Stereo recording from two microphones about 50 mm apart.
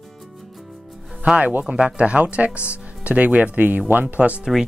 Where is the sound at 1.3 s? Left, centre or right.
Right.